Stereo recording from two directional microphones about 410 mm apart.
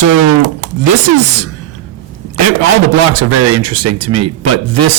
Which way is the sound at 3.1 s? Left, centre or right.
Right.